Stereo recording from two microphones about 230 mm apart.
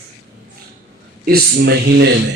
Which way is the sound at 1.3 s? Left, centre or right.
Right.